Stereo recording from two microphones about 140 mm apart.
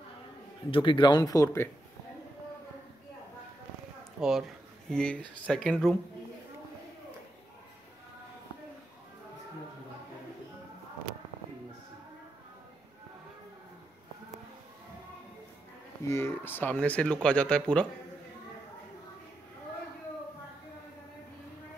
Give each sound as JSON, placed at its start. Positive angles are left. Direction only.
{"t": 0.7, "sound": "speech", "side_deg": 40}
{"t": 4.2, "sound": "speech", "side_deg": 0}
{"t": 16.1, "sound": "speech", "side_deg": 20}